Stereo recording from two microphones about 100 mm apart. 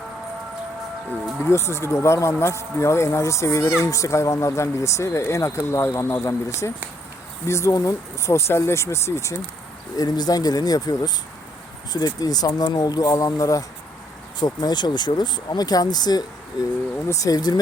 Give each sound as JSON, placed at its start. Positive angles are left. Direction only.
{"t": 1.4, "sound": "speech", "side_deg": 25}
{"t": 10.0, "sound": "speech", "side_deg": 40}